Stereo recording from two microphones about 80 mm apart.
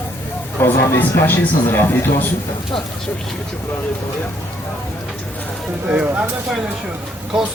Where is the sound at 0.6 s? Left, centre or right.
Left.